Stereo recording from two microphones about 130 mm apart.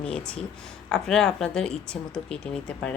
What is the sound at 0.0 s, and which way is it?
Speech, 5° left (ahead or behind).